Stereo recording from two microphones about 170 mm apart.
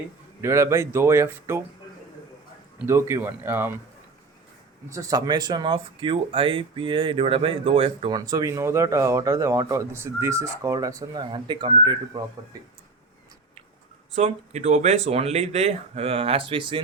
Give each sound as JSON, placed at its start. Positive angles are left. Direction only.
{"t": 0.4, "sound": "speech", "side_deg": -15}
{"t": 2.8, "sound": "speech", "side_deg": -15}
{"t": 4.9, "sound": "speech", "side_deg": -20}
{"t": 14.1, "sound": "speech", "side_deg": -40}